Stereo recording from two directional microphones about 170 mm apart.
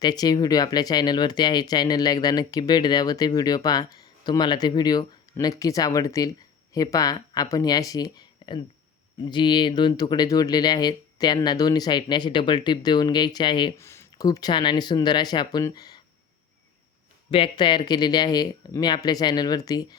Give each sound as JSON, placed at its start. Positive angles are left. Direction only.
{"t": 0.0, "sound": "speech", "side_deg": 25}
{"t": 13.7, "sound": "speech", "side_deg": 15}
{"t": 17.3, "sound": "speech", "side_deg": 30}